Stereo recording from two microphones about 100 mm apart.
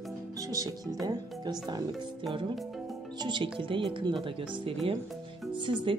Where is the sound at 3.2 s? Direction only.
50° right (ahead or behind).